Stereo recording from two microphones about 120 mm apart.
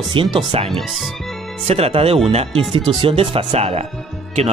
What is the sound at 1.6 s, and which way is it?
Speech, 60° right (ahead or behind).